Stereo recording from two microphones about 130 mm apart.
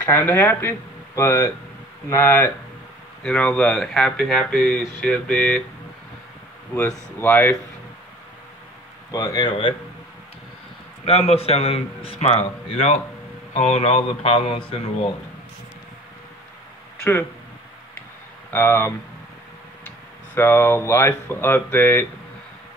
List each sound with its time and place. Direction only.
0.0 s speech: 15° left (ahead or behind)
7.2 s speech: 15° left (ahead or behind)
9.1 s speech: 30° left (ahead or behind)
11.1 s a man's voice: 55° left (ahead or behind)
18.5 s speech: 20° left (ahead or behind)
20.3 s speech: 20° left (ahead or behind)